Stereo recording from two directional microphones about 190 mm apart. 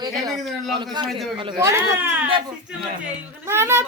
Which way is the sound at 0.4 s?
Centre (ahead or behind).